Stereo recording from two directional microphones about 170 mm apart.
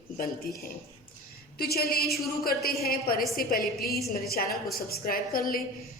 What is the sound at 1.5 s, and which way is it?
A woman's voice, 65° left (ahead or behind).